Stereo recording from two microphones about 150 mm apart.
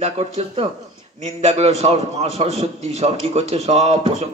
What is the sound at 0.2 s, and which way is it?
A man's voice, 45° right (ahead or behind).